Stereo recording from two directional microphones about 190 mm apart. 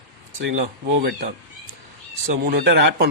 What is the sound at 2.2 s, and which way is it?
Speech, 55° right (ahead or behind).